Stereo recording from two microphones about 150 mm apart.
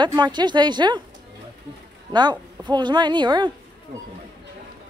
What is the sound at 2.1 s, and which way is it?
A woman's voice, 30° right (ahead or behind).